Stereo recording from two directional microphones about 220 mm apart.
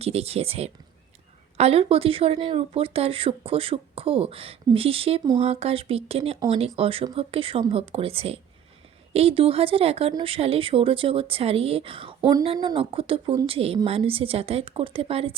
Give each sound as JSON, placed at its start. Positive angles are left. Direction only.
{"t": 0.0, "sound": "speech", "side_deg": -30}